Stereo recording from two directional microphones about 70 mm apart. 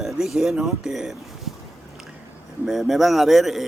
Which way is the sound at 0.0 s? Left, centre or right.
Centre.